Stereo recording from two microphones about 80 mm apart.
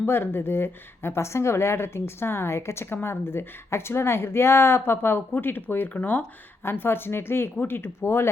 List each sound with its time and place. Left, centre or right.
0.0 s a woman's voice: left